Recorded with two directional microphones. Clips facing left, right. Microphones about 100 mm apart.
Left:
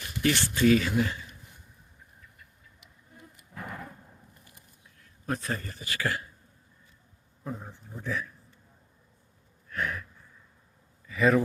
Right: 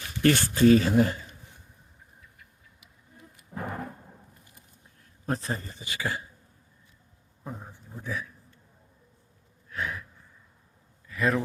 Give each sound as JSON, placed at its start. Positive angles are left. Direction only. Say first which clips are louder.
{"t": 0.2, "sound": "speech", "louder": "right 4 dB", "side_deg": -50}
{"t": 3.5, "sound": "thunder", "louder": "right 5 dB", "side_deg": -35}
{"t": 4.9, "sound": "a man's voice", "louder": "right 2 dB", "side_deg": -30}
{"t": 7.7, "sound": "a man's voice", "louder": "even", "side_deg": -15}
{"t": 9.6, "sound": "gasp", "louder": "left 1 dB", "side_deg": -10}
{"t": 11.0, "sound": "a sound", "louder": "left 3 dB", "side_deg": 0}